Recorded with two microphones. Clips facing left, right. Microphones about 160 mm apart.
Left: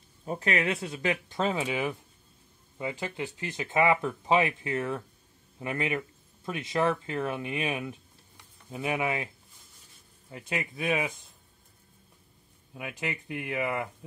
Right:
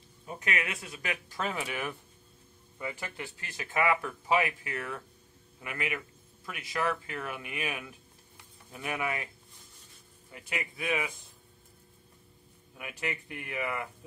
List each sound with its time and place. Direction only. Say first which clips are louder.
0.2 s speech: left 6 dB; 35° left (ahead or behind)
10.3 s speech: left 4 dB; 25° left (ahead or behind)
12.7 s speech: left 2 dB; 25° left (ahead or behind)